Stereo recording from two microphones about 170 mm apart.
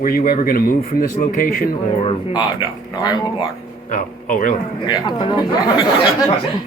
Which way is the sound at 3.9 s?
50° left (ahead or behind).